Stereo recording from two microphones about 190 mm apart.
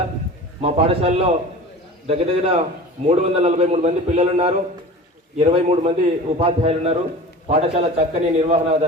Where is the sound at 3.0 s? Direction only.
35° right (ahead or behind).